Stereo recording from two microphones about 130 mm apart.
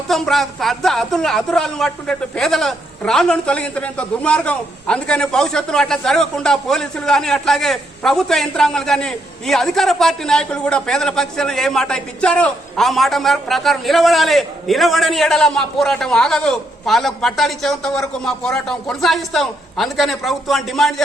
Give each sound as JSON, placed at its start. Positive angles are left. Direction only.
{"t": 0.1, "sound": "speech", "side_deg": 0}